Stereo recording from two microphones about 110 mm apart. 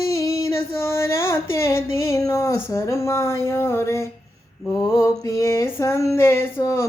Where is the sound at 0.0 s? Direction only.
30° left (ahead or behind).